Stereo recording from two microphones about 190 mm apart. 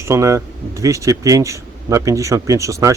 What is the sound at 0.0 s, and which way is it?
Speech, 15° right (ahead or behind).